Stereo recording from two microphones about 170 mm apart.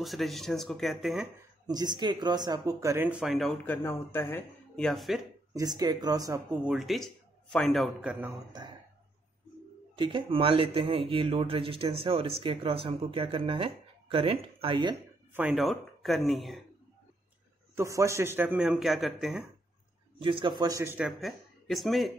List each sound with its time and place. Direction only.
0.0 s a man's voice: centre (ahead or behind)
1.7 s speech: 25° right (ahead or behind); by 5.2 s centre (ahead or behind)
5.5 s speech: 20° right (ahead or behind)
6.6 s a man's voice: centre (ahead or behind)
9.9 s speech: 30° right (ahead or behind)
15.3 s a man's voice: 5° right (ahead or behind)
17.7 s speech: 15° right (ahead or behind); by 19.4 s centre (ahead or behind)
20.2 s speech: 30° right (ahead or behind); by 21.1 s 15° right (ahead or behind)
21.1 s speech: centre (ahead or behind)